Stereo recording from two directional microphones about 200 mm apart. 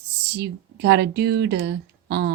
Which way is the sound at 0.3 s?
60° right (ahead or behind).